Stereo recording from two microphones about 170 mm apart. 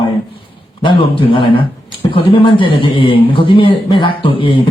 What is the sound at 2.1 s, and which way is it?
A man's voice, 30° left (ahead or behind).